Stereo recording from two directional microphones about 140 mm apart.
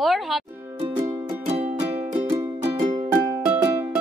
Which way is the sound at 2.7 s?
55° right (ahead or behind).